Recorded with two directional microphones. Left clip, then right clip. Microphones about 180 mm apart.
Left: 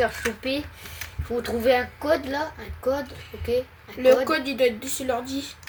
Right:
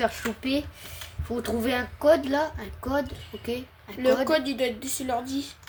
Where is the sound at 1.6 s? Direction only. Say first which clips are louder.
Left 9 dB; 45° right (ahead or behind).